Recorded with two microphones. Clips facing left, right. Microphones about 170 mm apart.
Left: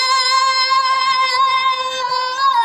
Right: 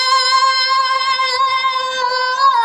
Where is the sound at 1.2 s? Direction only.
25° left (ahead or behind).